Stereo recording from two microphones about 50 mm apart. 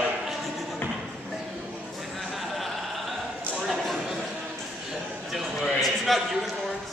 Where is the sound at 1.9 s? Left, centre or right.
Centre.